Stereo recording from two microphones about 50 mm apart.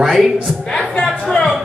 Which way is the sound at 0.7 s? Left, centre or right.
Centre.